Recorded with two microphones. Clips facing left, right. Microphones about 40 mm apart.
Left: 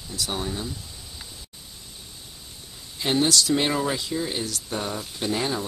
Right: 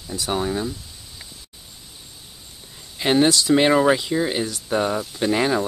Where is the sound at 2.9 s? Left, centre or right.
Right.